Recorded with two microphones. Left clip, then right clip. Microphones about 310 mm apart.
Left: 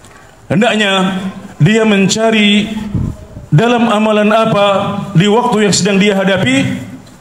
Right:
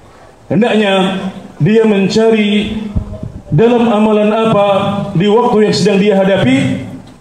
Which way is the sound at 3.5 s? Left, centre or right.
Left.